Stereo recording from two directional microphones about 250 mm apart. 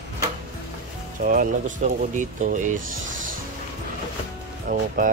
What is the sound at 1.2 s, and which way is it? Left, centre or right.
Speech, right.